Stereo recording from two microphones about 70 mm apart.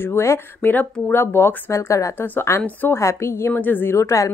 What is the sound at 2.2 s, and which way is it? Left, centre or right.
Speech, left.